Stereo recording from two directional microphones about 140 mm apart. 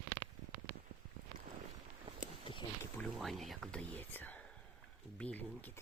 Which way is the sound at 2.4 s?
35° left (ahead or behind).